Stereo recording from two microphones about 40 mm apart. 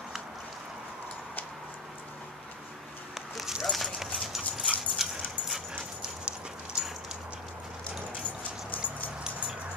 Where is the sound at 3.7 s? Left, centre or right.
Centre.